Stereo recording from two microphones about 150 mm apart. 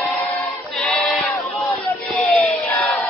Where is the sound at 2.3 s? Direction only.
10° left (ahead or behind).